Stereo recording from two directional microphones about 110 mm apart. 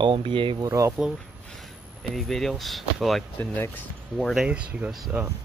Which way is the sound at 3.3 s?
20° left (ahead or behind).